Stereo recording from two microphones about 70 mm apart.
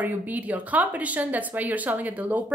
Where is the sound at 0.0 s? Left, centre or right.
Right.